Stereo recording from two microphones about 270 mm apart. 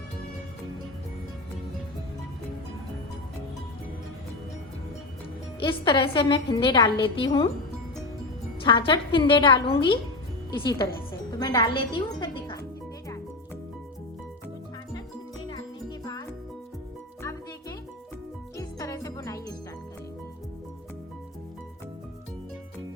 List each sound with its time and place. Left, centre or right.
5.5 s a woman's voice: centre
8.6 s a woman's voice: centre
18.5 s music: centre